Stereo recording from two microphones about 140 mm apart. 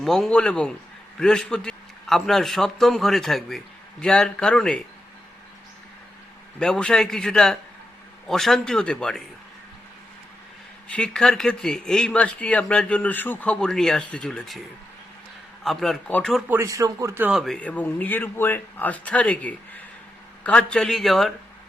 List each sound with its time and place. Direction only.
0.0 s a man's voice: centre (ahead or behind)
6.6 s a man's voice: 5° left (ahead or behind)
10.8 s a man's voice: 5° left (ahead or behind)
15.6 s a man's voice: centre (ahead or behind)
16.5 s speech: 20° right (ahead or behind)
17.2 s a man's voice: centre (ahead or behind)